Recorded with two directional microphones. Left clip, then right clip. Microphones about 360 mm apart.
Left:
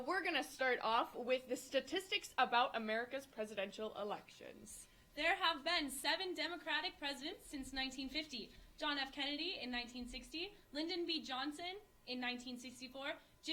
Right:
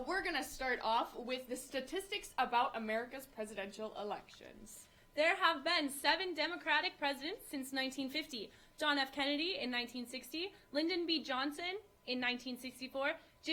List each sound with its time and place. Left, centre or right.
0.1 s a woman's voice: left
5.1 s a woman's voice: right